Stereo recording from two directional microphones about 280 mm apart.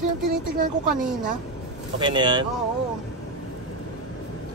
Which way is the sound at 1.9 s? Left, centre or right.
Centre.